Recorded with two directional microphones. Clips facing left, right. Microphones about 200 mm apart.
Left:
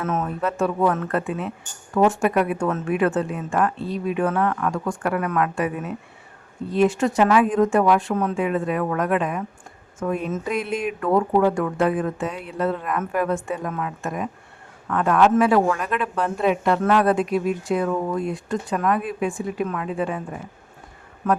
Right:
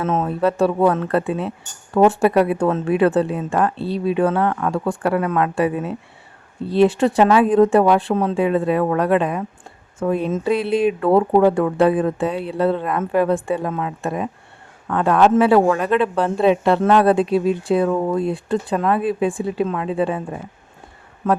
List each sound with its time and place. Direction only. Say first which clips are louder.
0.0 s speech: right 5 dB; 30° right (ahead or behind)